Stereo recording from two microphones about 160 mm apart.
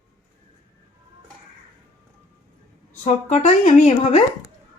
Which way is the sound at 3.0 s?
45° left (ahead or behind).